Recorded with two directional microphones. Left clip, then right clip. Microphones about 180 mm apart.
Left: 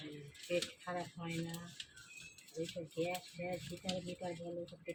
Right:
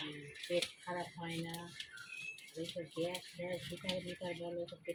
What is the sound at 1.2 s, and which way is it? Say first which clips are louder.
Speech: right 1 dB; 10° left (ahead or behind).